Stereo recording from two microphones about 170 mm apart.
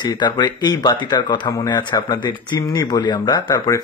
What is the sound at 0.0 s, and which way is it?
Speech, 25° left (ahead or behind).